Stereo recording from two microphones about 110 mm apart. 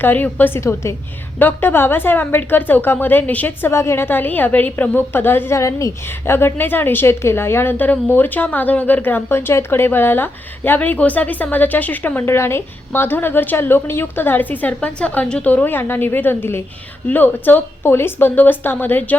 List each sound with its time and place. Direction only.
0.0 s a woman's voice: 15° left (ahead or behind)